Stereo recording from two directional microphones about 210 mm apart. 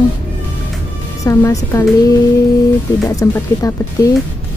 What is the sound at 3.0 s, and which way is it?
Speech, 15° left (ahead or behind).